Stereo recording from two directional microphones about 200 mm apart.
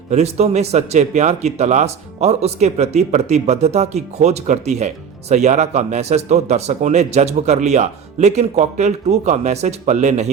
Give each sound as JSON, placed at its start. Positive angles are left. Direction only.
{"t": 0.1, "sound": "speech", "side_deg": -35}